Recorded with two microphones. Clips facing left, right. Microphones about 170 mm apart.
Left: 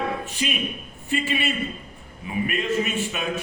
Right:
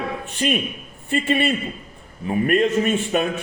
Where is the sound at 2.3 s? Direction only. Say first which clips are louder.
Right 7 dB; 45° right (ahead or behind).